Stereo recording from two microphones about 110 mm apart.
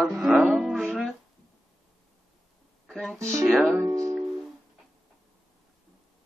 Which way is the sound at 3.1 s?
25° right (ahead or behind).